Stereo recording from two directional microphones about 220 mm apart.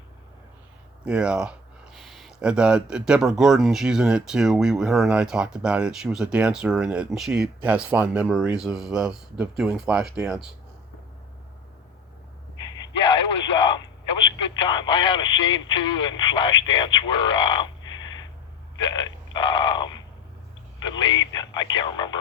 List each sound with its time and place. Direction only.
1.0 s speech: 5° right (ahead or behind)
12.5 s a sound: 20° left (ahead or behind)
13.4 s radio: 20° left (ahead or behind)
14.4 s speech: 20° left (ahead or behind)
18.8 s a sound: 20° left (ahead or behind)
20.8 s speech: 20° left (ahead or behind)